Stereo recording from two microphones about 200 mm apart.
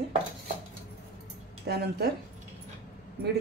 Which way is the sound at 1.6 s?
55° right (ahead or behind).